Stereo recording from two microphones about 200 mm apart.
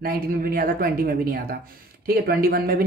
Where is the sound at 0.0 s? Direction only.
45° right (ahead or behind).